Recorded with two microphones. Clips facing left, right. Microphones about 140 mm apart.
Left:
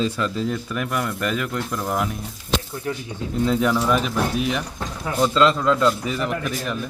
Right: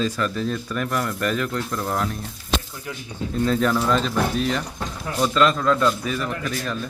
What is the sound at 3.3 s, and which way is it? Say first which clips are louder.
Speech: left 1 dB; 15° left (ahead or behind).